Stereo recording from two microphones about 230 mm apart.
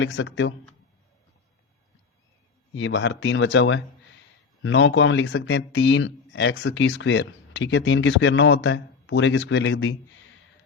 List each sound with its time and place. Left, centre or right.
0.0 s speech: left
2.7 s speech: left